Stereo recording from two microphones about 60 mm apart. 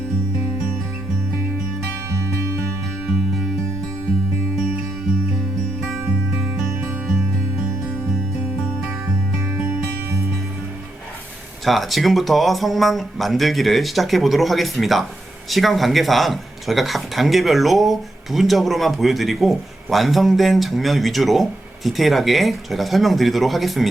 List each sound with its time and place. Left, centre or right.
11.6 s speech: centre